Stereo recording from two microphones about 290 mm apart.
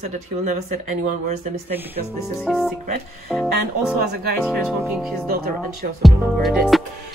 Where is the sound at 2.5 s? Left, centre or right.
Centre.